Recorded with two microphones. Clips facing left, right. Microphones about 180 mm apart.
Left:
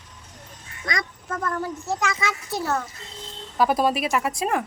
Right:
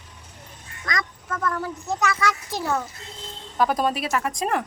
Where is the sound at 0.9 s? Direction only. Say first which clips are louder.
Even; 25° left (ahead or behind).